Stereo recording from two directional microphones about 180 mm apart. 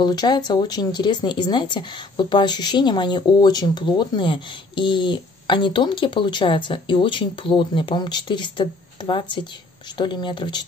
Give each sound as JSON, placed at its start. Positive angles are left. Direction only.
{"t": 0.0, "sound": "speech", "side_deg": 25}